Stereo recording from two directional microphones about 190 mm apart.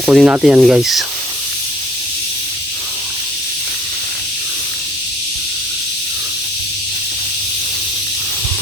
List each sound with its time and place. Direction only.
0.0 s rub: centre (ahead or behind)